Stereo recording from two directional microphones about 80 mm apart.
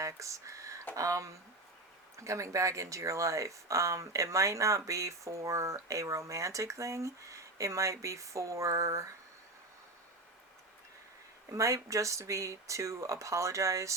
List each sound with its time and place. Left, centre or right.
0.0 s a sound: right
0.9 s speech: right
11.5 s speech: right